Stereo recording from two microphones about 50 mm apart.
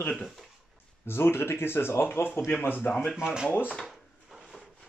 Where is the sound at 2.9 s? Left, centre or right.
Left.